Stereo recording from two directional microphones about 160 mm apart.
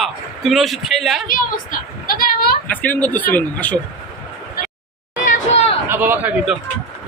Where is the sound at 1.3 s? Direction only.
60° left (ahead or behind).